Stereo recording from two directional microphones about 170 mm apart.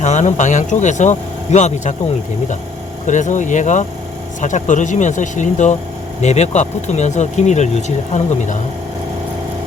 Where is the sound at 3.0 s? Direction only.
45° left (ahead or behind).